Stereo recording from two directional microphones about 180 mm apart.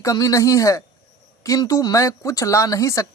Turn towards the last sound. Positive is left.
turn(degrees=20)  # may be behind; listen again after turning